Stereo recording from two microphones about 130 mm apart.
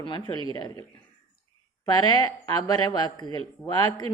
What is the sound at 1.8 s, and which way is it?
Speech, 30° left (ahead or behind).